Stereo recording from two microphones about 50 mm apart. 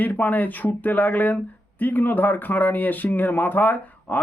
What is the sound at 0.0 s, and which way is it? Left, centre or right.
Speech, left.